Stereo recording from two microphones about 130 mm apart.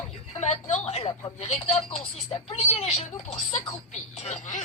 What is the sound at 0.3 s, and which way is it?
Speech, 60° left (ahead or behind).